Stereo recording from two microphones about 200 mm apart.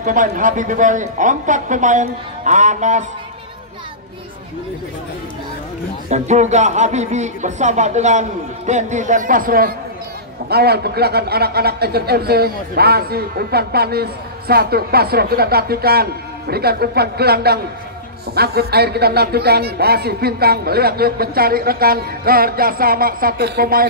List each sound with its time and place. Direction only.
0.0 s speech: 40° right (ahead or behind)
6.0 s speech: 35° right (ahead or behind)